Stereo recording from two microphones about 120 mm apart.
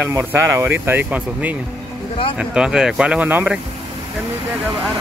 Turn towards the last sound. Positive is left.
turn(degrees=-10)  # may be behind; listen again after turning